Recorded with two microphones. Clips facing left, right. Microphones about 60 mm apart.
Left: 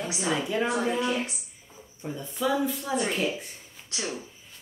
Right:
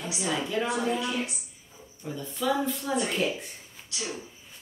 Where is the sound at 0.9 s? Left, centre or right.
Left.